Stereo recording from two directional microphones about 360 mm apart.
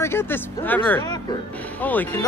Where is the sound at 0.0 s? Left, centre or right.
Centre.